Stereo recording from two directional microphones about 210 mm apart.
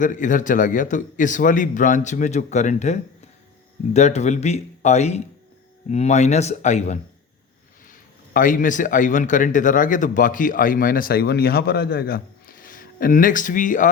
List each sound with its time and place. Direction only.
0.0 s a man's voice: 40° left (ahead or behind)